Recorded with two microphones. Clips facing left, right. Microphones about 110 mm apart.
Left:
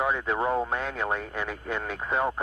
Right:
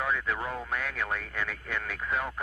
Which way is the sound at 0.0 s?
25° left (ahead or behind).